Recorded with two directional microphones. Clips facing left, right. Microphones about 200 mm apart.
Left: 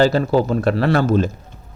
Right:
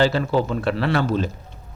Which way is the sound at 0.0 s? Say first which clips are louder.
Left 4 dB; 40° left (ahead or behind).